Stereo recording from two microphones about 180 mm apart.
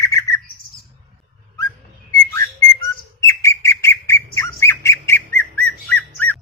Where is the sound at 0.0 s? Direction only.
15° left (ahead or behind).